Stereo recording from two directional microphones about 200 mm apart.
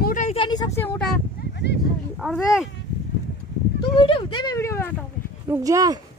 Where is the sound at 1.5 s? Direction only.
55° left (ahead or behind).